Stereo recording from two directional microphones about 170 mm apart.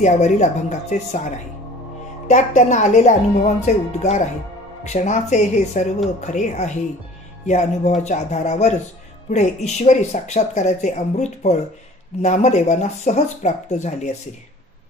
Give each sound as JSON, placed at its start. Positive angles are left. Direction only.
{"t": 0.0, "sound": "speech", "side_deg": 45}
{"t": 2.2, "sound": "speech", "side_deg": 45}